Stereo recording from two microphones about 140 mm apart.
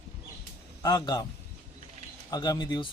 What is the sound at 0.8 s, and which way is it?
Speech, 30° left (ahead or behind).